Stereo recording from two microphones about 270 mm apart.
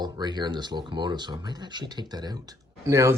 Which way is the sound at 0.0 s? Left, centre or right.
Centre.